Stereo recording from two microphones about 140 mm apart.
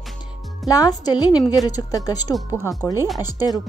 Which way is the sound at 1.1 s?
30° left (ahead or behind).